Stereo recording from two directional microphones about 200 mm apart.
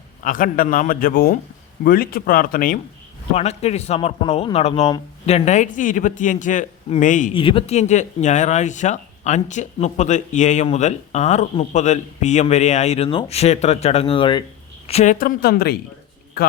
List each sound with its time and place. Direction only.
0.2 s a man's voice: 40° left (ahead or behind)
3.3 s speech: 30° left (ahead or behind)
7.3 s speech: 25° left (ahead or behind)
14.8 s a man's voice: 35° left (ahead or behind); by 15.8 s 55° left (ahead or behind)